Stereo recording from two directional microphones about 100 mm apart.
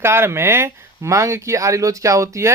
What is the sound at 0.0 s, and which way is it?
Speech, 25° right (ahead or behind).